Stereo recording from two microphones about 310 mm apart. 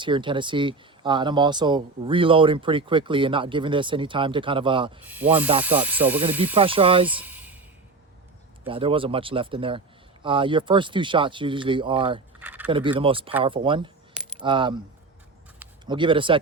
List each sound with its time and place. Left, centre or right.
0.0 s speech: centre
5.0 s speech: centre
6.6 s speech: centre
7.1 s a sound: centre
8.6 s speech: centre
12.4 s a sound: centre
12.6 s speech: centre